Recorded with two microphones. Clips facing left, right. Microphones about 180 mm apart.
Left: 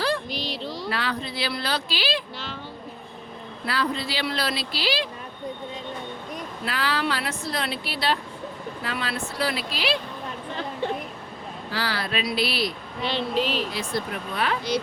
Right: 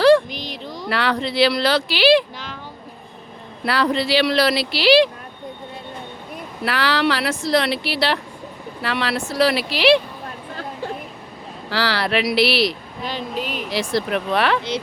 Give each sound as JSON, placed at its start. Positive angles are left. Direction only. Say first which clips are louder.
{"t": 0.3, "sound": "a sound", "louder": "even", "side_deg": -20}
{"t": 0.9, "sound": "a woman's voice", "louder": "right 9 dB", "side_deg": -75}
{"t": 3.6, "sound": "a woman's voice", "louder": "right 7 dB", "side_deg": -80}
{"t": 6.7, "sound": "a woman's voice", "louder": "right 7 dB", "side_deg": -80}
{"t": 11.7, "sound": "a woman's voice", "louder": "right 8 dB", "side_deg": -80}
{"t": 13.1, "sound": "speech", "louder": "left 3 dB", "side_deg": -10}
{"t": 13.7, "sound": "a woman's voice", "louder": "right 7 dB", "side_deg": -85}